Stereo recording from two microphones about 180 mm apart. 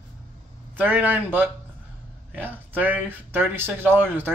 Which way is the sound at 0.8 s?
10° right (ahead or behind).